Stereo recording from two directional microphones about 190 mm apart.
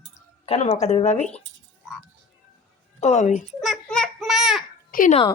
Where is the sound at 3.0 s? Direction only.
35° left (ahead or behind).